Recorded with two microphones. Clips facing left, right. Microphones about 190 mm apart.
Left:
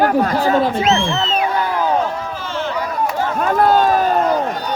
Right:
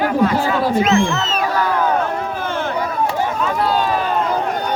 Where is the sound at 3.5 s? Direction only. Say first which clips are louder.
Left 6 dB; 45° left (ahead or behind).